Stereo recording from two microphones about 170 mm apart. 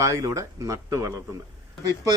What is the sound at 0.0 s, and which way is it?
Speech, 20° right (ahead or behind).